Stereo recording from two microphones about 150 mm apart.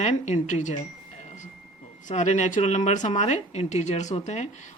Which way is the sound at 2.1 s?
55° left (ahead or behind).